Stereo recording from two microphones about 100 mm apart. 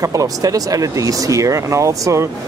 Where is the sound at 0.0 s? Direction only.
35° right (ahead or behind).